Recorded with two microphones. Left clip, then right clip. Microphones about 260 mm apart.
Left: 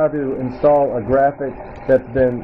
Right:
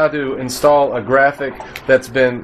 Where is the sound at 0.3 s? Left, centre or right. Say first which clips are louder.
Right 1 dB; right.